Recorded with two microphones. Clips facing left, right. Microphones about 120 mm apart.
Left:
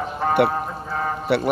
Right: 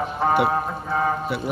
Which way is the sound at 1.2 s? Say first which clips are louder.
Left 6 dB; 75° left (ahead or behind).